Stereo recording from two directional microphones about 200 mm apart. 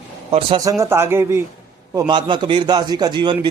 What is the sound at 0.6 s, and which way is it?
A man's voice, 15° right (ahead or behind).